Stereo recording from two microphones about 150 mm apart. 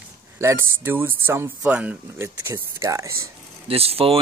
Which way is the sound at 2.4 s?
20° right (ahead or behind).